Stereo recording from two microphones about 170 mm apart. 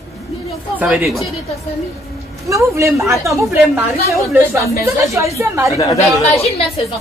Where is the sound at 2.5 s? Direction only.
15° right (ahead or behind).